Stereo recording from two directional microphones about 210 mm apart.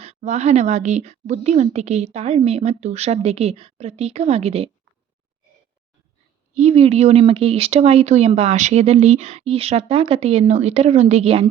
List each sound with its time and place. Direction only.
0.0 s a woman's voice: 30° right (ahead or behind)
6.5 s speech: 30° right (ahead or behind)